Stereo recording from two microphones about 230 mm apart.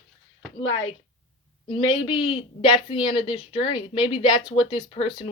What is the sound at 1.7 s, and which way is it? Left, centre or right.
A woman's voice, left.